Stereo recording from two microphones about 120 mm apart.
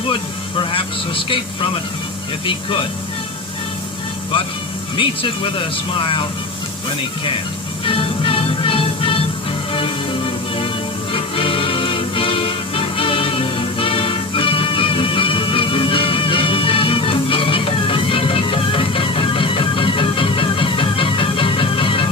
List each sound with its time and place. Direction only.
0.1 s vehicle: 45° left (ahead or behind)
2.5 s speech: 45° left (ahead or behind)
4.9 s speech: 45° left (ahead or behind)
7.9 s music: 45° left (ahead or behind)